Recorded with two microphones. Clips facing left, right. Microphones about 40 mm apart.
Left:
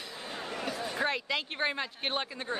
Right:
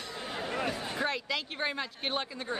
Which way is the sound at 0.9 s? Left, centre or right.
Centre.